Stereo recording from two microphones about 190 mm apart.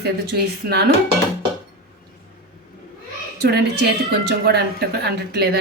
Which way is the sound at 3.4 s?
55° right (ahead or behind).